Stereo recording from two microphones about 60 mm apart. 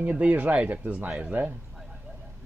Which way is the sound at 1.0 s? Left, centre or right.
Centre.